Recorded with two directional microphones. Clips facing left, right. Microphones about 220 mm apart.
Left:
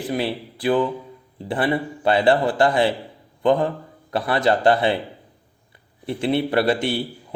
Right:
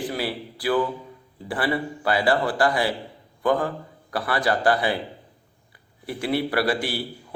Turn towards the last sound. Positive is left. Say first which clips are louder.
# left 4 dB
turn(degrees=25)  # may be behind; listen again after turning